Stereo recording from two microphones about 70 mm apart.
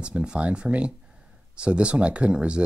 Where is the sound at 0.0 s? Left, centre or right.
Centre.